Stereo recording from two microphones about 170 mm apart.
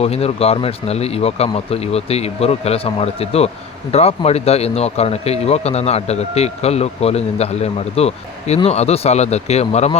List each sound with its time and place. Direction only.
0.0 s a man's voice: 35° left (ahead or behind)